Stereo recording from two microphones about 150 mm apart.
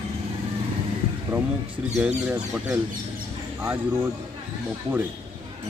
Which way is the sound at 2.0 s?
10° right (ahead or behind).